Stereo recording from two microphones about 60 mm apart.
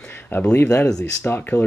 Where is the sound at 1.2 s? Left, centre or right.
Left.